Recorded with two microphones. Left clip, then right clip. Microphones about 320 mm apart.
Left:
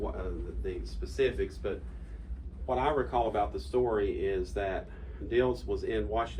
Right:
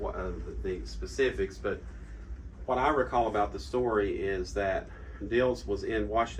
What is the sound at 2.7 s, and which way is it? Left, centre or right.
Speech, right.